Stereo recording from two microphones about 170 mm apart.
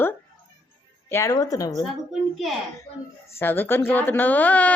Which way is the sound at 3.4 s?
10° left (ahead or behind).